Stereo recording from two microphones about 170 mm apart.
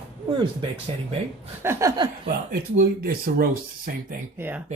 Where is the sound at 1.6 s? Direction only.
15° right (ahead or behind).